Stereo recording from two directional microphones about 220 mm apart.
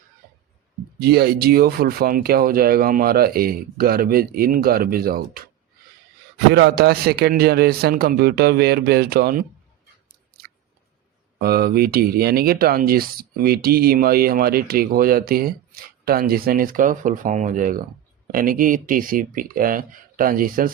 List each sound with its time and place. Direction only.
1.0 s speech: 45° right (ahead or behind)
6.5 s speech: 50° right (ahead or behind)
11.3 s speech: 45° right (ahead or behind)